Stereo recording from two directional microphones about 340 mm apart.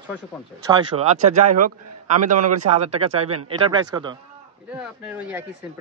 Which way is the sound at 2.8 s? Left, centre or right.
Centre.